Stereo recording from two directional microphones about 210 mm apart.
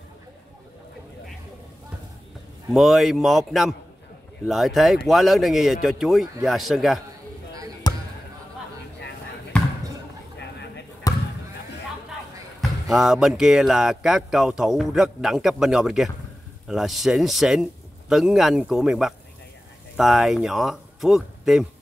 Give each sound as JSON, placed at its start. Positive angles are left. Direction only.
{"t": 2.7, "sound": "speech", "side_deg": 0}
{"t": 7.8, "sound": "basketball bounce", "side_deg": 20}
{"t": 9.5, "sound": "basketball bounce", "side_deg": 5}
{"t": 11.1, "sound": "basketball bounce", "side_deg": 15}
{"t": 12.5, "sound": "speech", "side_deg": 0}